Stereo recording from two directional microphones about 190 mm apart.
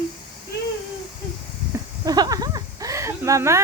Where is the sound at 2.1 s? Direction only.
20° right (ahead or behind).